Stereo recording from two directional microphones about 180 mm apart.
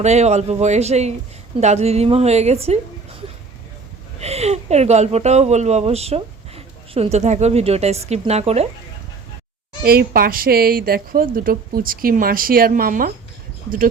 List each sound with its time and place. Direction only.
0.0 s speech: 40° right (ahead or behind)
4.2 s speech: 35° right (ahead or behind)
9.8 s a woman's voice: 55° right (ahead or behind)